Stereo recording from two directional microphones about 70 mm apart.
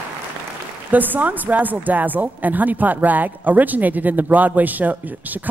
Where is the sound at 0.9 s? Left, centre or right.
Right.